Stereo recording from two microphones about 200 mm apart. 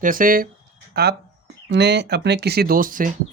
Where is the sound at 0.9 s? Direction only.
55° right (ahead or behind).